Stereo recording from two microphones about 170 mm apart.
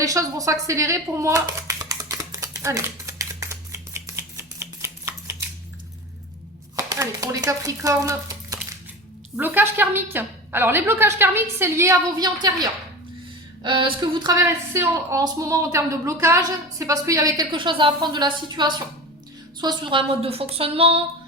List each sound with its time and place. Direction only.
0.0 s a sound: 20° right (ahead or behind)
6.7 s chopping: 20° right (ahead or behind)
9.3 s a woman's voice: 10° right (ahead or behind); by 21.0 s 35° right (ahead or behind)